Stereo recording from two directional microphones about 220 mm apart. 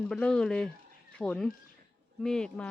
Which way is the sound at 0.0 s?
5° left (ahead or behind).